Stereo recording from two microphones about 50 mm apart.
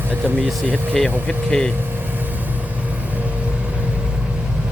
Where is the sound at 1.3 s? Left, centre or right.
Centre.